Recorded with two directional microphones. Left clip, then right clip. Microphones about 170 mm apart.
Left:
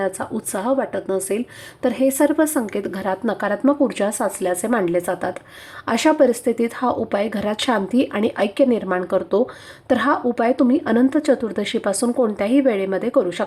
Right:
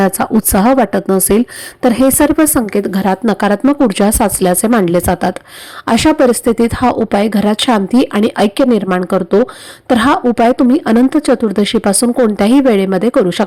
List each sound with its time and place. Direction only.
0.0 s speech: 40° right (ahead or behind)